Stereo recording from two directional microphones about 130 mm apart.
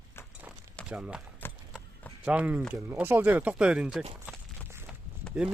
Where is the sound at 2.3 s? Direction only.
10° right (ahead or behind).